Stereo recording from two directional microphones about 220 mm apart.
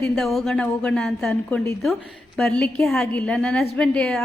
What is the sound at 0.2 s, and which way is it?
A woman's voice, centre (ahead or behind).